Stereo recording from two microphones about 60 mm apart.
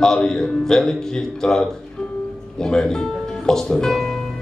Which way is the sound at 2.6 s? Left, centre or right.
Centre.